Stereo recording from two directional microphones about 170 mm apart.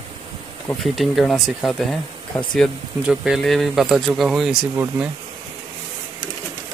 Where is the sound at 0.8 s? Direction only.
Centre (ahead or behind).